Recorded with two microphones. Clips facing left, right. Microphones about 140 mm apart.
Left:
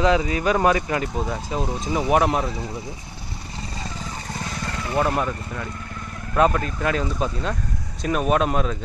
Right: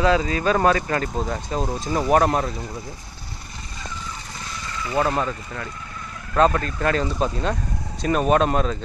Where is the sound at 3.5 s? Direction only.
30° left (ahead or behind).